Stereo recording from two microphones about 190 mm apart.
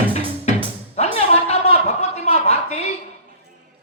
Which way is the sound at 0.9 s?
35° left (ahead or behind).